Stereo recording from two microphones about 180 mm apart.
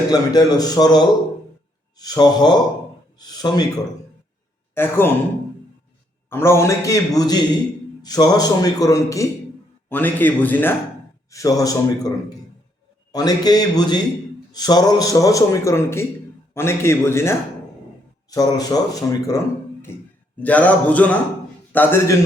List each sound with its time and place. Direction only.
0.1 s a man's voice: 20° left (ahead or behind)
4.7 s a man's voice: 10° left (ahead or behind)
6.3 s a man's voice: 15° left (ahead or behind)